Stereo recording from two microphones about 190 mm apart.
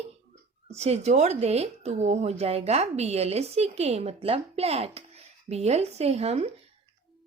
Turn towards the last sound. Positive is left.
turn(degrees=-35)  # may be behind; listen again after turning